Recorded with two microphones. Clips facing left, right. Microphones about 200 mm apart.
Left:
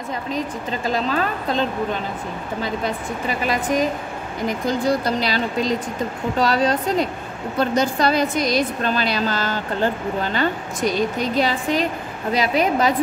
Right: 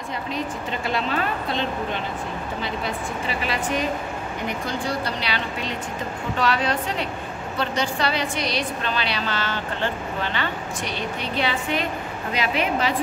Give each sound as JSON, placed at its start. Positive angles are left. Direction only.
{"t": 0.3, "sound": "speech", "side_deg": 40}
{"t": 2.6, "sound": "a woman's voice", "side_deg": 45}